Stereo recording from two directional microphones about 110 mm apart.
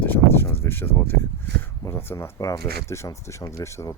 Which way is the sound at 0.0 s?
15° left (ahead or behind).